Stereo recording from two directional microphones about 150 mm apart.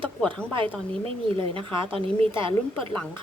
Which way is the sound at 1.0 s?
35° right (ahead or behind).